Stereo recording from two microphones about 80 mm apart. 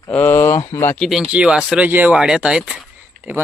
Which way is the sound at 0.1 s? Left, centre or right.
Left.